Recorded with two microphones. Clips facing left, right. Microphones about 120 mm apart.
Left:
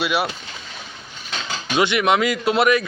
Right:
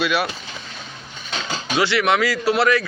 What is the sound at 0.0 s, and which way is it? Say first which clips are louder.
Speech: right 1 dB; 20° left (ahead or behind).